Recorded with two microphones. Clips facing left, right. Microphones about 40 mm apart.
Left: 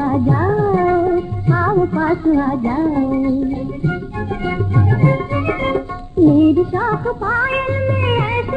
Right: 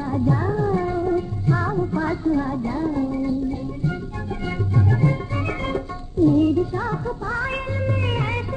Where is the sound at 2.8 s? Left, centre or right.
Left.